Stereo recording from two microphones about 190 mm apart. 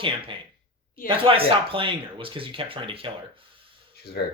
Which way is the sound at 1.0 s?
30° right (ahead or behind).